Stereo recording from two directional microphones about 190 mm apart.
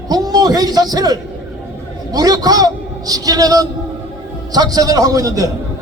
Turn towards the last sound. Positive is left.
turn(degrees=-20)  # may be behind; listen again after turning